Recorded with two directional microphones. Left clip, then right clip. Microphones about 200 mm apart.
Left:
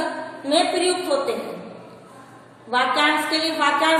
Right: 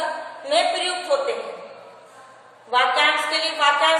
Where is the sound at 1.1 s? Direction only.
15° left (ahead or behind).